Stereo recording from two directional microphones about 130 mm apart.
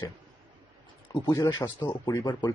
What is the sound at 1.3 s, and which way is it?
Speech, 25° left (ahead or behind).